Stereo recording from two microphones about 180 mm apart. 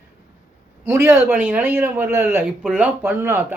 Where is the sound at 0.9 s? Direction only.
15° right (ahead or behind).